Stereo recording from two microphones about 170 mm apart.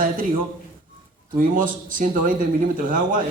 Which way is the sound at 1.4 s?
55° right (ahead or behind).